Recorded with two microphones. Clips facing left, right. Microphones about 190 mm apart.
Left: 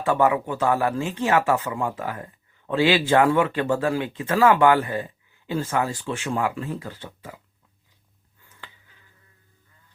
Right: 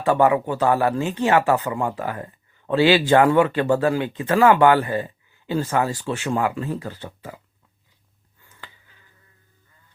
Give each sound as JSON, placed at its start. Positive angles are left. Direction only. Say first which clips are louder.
{"t": 0.0, "sound": "speech", "louder": "right 3 dB", "side_deg": -35}